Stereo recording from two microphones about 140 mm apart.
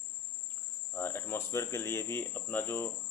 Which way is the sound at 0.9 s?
15° left (ahead or behind).